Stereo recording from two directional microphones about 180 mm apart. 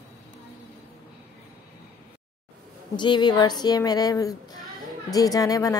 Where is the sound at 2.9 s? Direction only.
25° left (ahead or behind).